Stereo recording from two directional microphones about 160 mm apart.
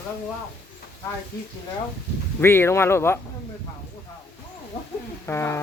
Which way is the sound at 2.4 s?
15° left (ahead or behind).